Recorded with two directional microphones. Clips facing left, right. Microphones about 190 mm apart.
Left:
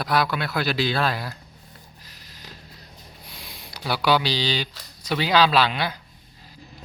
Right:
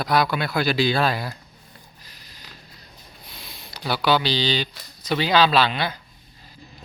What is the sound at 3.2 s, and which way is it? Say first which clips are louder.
Speech: even; 15° left (ahead or behind).